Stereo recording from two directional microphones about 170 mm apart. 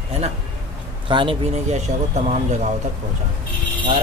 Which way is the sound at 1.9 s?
45° right (ahead or behind).